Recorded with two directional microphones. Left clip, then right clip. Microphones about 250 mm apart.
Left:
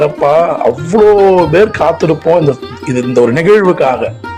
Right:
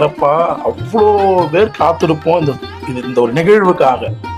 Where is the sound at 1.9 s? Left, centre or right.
Centre.